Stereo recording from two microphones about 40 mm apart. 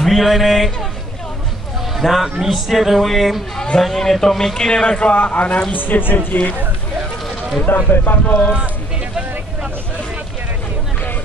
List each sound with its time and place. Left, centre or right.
0.0 s a man's voice: centre
2.0 s a man's voice: centre
4.6 s a man's voice: centre; by 5.6 s left
5.7 s speech: left
6.1 s speech: left
7.6 s speech: left
8.3 s speech: left